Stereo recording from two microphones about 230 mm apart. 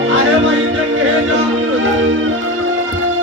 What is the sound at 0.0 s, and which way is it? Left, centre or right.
Music, right.